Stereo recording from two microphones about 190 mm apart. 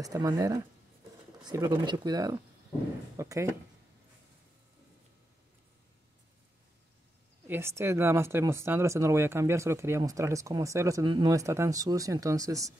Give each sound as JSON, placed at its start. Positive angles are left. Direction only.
{"t": 0.0, "sound": "speech", "side_deg": -20}
{"t": 7.4, "sound": "speech", "side_deg": -10}